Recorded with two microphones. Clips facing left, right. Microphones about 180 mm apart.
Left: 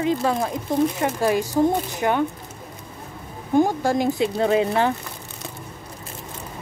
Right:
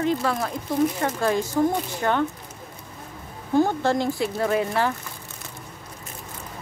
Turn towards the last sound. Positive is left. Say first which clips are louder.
# left 3 dB
turn(degrees=20)  # may be behind; listen again after turning